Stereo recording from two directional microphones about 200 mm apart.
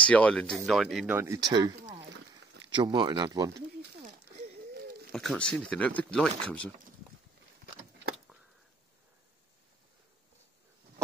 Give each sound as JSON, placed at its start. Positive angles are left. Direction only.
{"t": 0.0, "sound": "speech", "side_deg": 5}
{"t": 1.1, "sound": "speech", "side_deg": -15}
{"t": 3.5, "sound": "a sound", "side_deg": -55}
{"t": 5.1, "sound": "speech", "side_deg": 5}